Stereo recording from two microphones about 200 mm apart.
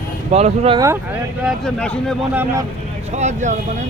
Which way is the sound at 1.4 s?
5° left (ahead or behind).